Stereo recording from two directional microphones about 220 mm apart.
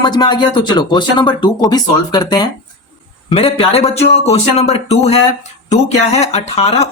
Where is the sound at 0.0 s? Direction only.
20° left (ahead or behind).